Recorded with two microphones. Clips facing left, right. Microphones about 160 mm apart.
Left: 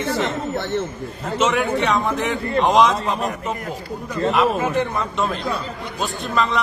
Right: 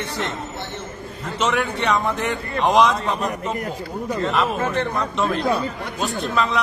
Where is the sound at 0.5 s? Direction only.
60° left (ahead or behind).